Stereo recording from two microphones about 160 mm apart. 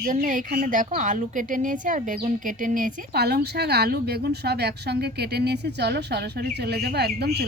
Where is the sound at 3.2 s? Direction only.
90° right.